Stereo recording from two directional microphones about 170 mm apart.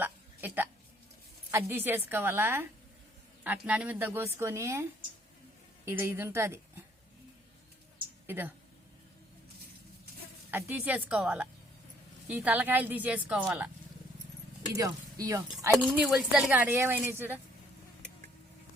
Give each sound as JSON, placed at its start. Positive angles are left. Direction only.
{"t": 0.0, "sound": "a sound", "side_deg": -10}
{"t": 1.5, "sound": "speech", "side_deg": -15}
{"t": 8.3, "sound": "speech", "side_deg": -10}
{"t": 10.5, "sound": "speech", "side_deg": -10}
{"t": 14.8, "sound": "speech", "side_deg": -20}
{"t": 15.8, "sound": "speech", "side_deg": -5}